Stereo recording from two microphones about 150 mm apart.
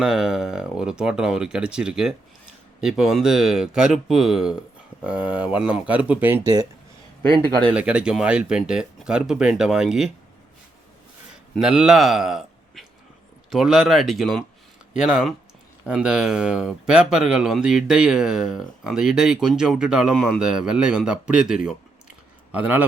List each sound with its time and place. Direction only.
0.0 s speech: centre (ahead or behind)
7.7 s speech: 5° right (ahead or behind)
11.5 s a man's voice: 5° right (ahead or behind)